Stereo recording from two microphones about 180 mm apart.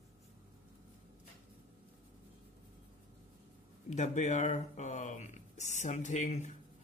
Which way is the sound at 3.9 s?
40° left (ahead or behind).